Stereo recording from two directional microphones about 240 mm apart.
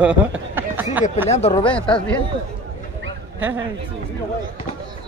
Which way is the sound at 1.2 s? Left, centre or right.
Left.